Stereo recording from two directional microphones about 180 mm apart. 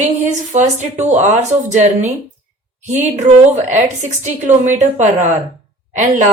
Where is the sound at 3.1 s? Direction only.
40° right (ahead or behind).